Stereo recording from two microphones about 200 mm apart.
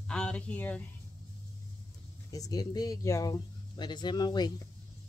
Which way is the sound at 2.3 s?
20° left (ahead or behind).